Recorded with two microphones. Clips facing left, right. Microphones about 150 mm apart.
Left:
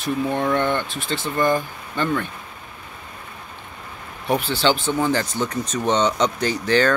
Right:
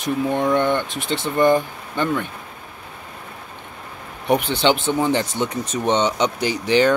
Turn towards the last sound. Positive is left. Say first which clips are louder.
# right 2 dB
turn(degrees=-15)  # may be behind; listen again after turning